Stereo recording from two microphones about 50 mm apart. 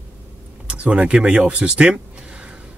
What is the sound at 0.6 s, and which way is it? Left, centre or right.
Speech, right.